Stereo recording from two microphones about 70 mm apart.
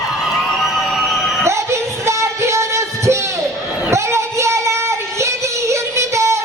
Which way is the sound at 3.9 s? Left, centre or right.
Right.